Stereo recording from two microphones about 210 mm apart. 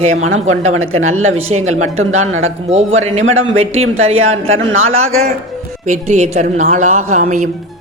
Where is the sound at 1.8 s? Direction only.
75° right (ahead or behind).